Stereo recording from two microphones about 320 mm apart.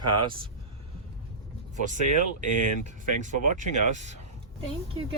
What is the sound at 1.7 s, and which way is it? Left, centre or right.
Speech, right.